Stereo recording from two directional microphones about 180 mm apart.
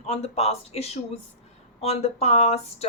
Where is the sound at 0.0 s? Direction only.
35° left (ahead or behind).